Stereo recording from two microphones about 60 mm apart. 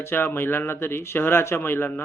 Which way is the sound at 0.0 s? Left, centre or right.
Left.